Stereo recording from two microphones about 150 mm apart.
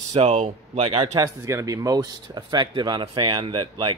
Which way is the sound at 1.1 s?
25° right (ahead or behind).